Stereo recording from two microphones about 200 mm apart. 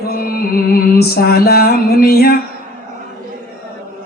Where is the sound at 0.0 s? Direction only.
50° left (ahead or behind).